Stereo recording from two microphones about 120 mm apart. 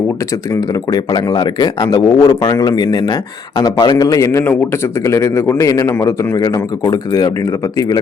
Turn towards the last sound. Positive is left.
turn(degrees=30)  # may be behind; listen again after turning